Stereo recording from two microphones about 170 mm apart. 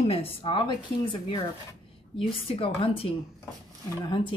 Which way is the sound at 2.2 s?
35° left (ahead or behind).